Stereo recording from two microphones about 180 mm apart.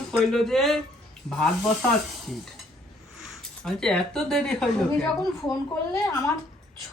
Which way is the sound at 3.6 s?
5° left (ahead or behind).